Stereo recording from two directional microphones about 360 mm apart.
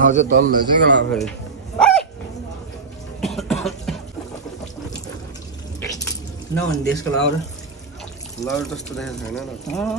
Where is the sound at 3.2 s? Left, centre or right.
Centre.